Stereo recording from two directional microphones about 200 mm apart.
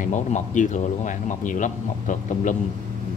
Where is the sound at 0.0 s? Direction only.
40° left (ahead or behind).